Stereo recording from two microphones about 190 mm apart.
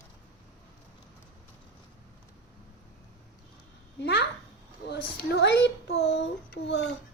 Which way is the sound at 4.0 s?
65° left (ahead or behind).